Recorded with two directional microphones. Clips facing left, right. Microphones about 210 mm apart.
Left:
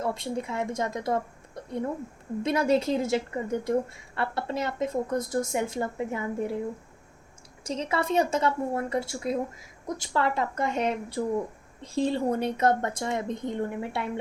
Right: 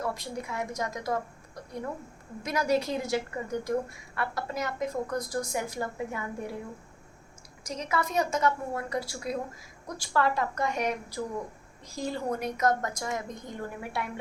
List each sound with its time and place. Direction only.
0.0 s a woman's voice: 25° left (ahead or behind)
7.6 s a woman's voice: 30° left (ahead or behind)